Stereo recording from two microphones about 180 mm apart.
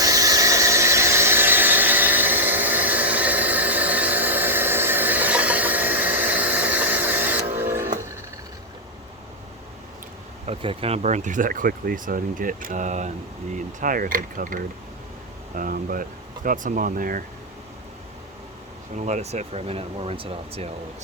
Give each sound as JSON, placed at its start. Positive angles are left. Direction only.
{"t": 0.0, "sound": "squeal", "side_deg": -20}
{"t": 10.4, "sound": "speech", "side_deg": -30}
{"t": 18.9, "sound": "speech", "side_deg": -40}